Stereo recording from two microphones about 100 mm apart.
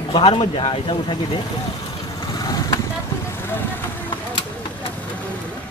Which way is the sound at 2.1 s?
40° left (ahead or behind).